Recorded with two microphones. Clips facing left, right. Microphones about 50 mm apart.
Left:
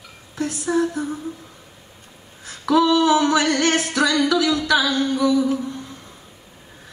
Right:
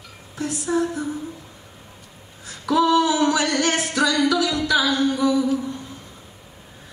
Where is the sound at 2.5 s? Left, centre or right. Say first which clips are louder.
Left 1 dB; left.